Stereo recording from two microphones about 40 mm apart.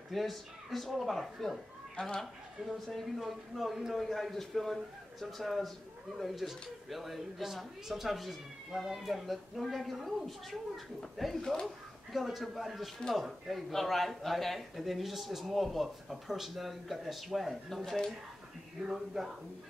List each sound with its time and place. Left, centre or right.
0.1 s a man's voice: centre
2.0 s speech: centre
2.6 s a man's voice: centre
18.8 s speech: centre